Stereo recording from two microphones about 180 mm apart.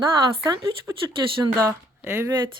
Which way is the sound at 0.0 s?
20° right (ahead or behind).